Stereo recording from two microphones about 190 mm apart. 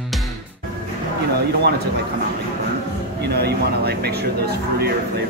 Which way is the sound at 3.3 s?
60° right (ahead or behind).